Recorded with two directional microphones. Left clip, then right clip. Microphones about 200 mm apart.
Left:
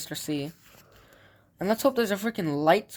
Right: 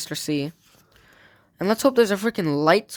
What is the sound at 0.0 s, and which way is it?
Speech, 45° right (ahead or behind).